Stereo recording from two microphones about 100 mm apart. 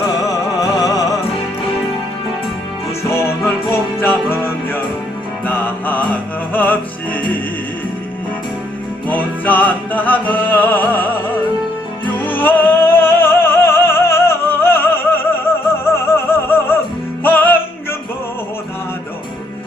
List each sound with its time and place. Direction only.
0.6 s music: 35° left (ahead or behind)
3.1 s music: 25° left (ahead or behind)
9.0 s music: 15° left (ahead or behind)